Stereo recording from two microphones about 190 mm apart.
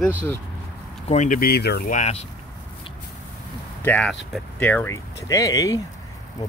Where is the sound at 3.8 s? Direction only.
5° left (ahead or behind).